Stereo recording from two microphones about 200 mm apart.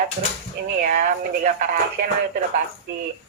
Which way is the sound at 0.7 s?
40° right (ahead or behind).